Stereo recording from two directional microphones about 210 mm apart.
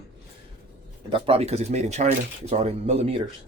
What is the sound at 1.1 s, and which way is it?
Speech, 30° right (ahead or behind).